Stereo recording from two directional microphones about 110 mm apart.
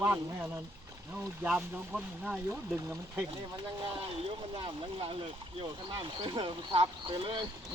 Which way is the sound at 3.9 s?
55° right (ahead or behind).